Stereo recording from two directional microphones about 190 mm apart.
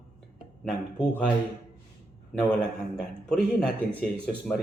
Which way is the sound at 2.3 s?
5° left (ahead or behind).